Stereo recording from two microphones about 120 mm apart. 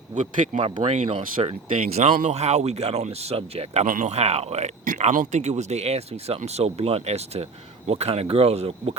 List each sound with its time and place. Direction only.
0.1 s speech: 90° right
0.5 s speech: 45° right (ahead or behind)
0.9 s speech: 60° right (ahead or behind)
2.0 s speech: 65° right (ahead or behind)